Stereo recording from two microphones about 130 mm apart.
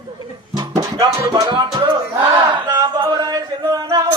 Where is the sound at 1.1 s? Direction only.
35° right (ahead or behind).